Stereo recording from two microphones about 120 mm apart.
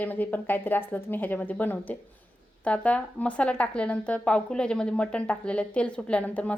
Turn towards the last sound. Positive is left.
turn(degrees=10)  # may be behind; listen again after turning